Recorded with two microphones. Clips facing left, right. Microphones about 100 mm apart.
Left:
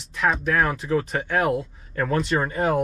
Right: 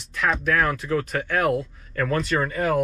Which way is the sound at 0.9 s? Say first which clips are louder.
Left 1 dB; 25° left (ahead or behind).